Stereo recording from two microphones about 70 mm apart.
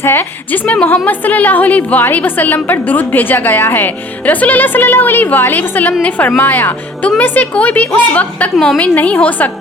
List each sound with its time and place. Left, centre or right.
0.0 s a woman's voice: left
8.5 s a woman's voice: centre
8.8 s a woman's voice: left